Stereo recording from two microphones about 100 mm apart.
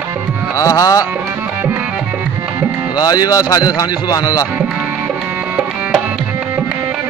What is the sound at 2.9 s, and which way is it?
Speech, 40° left (ahead or behind).